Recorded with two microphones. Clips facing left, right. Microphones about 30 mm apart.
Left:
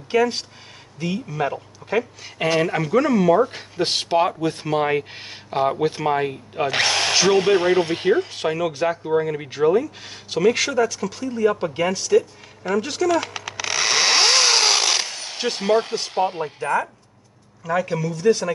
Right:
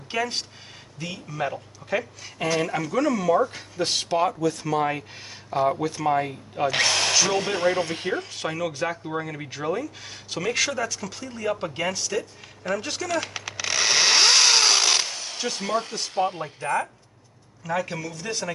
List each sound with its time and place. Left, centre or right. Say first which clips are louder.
0.1 s a man's voice: left 8 dB; centre
2.3 s speech: left 5 dB; left
4.4 s speech: left 2 dB; left; by 15.3 s centre
15.3 s speech: left 7 dB; left
16.6 s a man's voice: left 3 dB; centre